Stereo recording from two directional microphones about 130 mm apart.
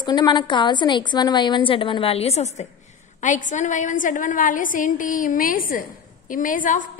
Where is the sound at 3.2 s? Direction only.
75° left (ahead or behind).